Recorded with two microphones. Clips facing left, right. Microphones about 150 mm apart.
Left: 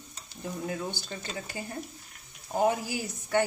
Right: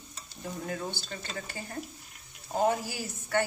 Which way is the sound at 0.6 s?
15° left (ahead or behind).